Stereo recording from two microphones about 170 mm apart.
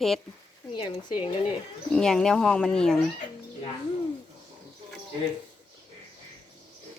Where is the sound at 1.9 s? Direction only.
5° left (ahead or behind).